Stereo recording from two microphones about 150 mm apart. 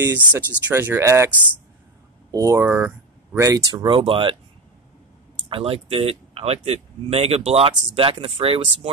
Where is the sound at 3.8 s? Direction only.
35° right (ahead or behind).